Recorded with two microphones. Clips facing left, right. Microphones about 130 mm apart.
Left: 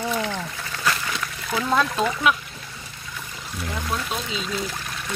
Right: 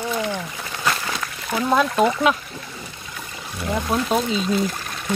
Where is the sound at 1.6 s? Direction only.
20° right (ahead or behind).